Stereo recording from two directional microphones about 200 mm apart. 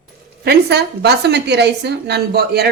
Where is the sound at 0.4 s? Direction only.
55° right (ahead or behind).